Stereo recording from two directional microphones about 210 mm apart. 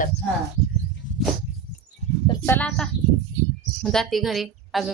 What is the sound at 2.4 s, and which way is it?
Speech, 10° left (ahead or behind).